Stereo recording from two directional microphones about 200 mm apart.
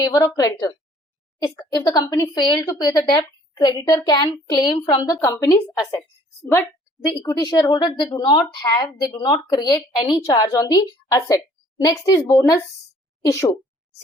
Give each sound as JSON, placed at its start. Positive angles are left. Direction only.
{"t": 0.0, "sound": "a woman's voice", "side_deg": 15}